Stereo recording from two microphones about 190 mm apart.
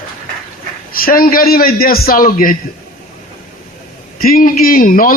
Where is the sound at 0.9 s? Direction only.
50° left (ahead or behind).